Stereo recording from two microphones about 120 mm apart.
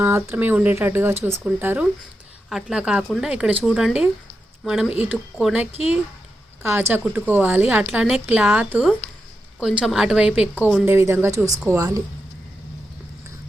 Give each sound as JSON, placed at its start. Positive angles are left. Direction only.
{"t": 0.0, "sound": "speech", "side_deg": -20}
{"t": 2.5, "sound": "speech", "side_deg": -5}
{"t": 6.6, "sound": "speech", "side_deg": -20}
{"t": 10.8, "sound": "speech", "side_deg": -20}